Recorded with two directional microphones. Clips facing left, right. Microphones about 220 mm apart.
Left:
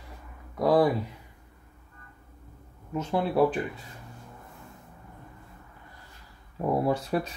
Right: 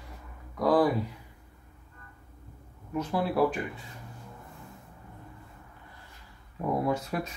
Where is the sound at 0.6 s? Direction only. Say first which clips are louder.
Left 2 dB; 25° left (ahead or behind).